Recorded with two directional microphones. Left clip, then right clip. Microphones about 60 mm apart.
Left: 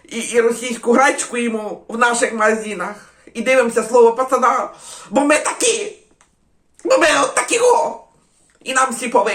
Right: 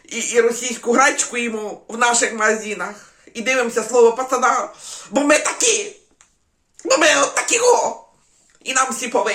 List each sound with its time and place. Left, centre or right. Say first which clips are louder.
0.0 s speech: left 1 dB; centre
1.1 s speech: left 1 dB; right
4.2 s speech: left 2 dB; right
9.0 s speech: left 4 dB; centre